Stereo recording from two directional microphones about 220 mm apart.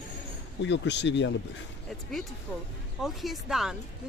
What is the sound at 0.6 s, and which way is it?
Speech, 55° left (ahead or behind).